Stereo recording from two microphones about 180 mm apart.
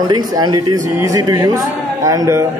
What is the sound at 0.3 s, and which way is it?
Speech, 20° right (ahead or behind).